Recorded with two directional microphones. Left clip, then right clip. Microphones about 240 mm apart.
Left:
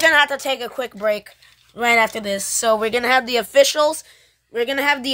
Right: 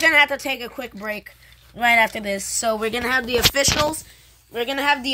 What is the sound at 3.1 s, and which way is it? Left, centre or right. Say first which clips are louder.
Speech: left 3 dB; left.